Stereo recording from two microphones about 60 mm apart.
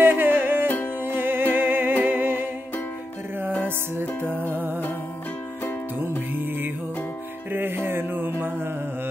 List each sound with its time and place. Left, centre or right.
0.0 s music: right
4.4 s music: right
7.5 s mantra: right